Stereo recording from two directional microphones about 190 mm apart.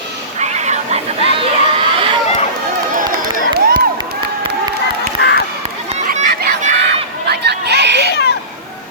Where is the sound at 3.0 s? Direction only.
50° right (ahead or behind).